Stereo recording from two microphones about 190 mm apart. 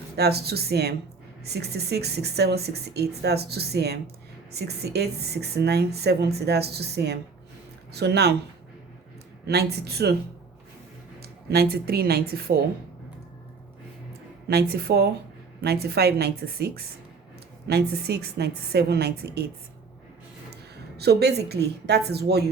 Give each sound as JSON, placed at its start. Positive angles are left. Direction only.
{"t": 0.2, "sound": "a woman's voice", "side_deg": -55}
{"t": 9.5, "sound": "a woman's voice", "side_deg": -55}
{"t": 11.2, "sound": "a woman's voice", "side_deg": -55}
{"t": 14.4, "sound": "a woman's voice", "side_deg": -60}
{"t": 21.0, "sound": "a woman's voice", "side_deg": -60}